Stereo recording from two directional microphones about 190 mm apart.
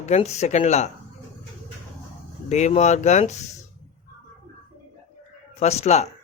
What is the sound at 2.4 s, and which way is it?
Speech, 40° left (ahead or behind).